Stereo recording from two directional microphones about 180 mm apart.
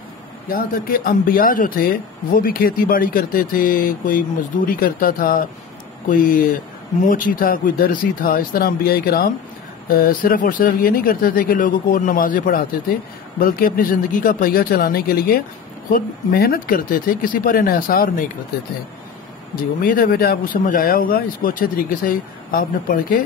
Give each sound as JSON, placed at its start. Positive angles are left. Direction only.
{"t": 0.5, "sound": "speech", "side_deg": 55}
{"t": 19.5, "sound": "speech", "side_deg": 50}